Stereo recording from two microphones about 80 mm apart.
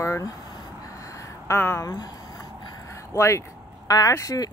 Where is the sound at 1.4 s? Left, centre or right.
Left.